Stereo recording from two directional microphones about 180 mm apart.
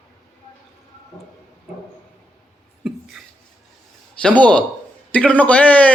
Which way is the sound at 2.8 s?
5° right (ahead or behind).